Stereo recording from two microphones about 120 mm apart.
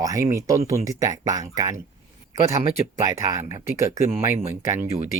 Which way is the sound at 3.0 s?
25° right (ahead or behind).